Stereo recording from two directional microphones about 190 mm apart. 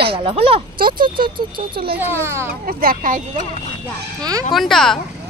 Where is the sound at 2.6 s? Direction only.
50° right (ahead or behind).